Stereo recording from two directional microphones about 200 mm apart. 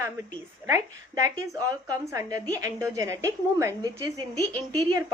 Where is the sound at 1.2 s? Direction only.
15° right (ahead or behind).